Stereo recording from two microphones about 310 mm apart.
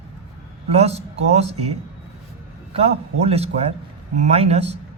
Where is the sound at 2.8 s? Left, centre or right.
Centre.